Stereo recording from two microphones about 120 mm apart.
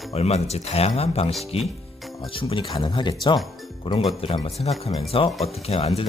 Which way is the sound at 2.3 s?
45° left (ahead or behind).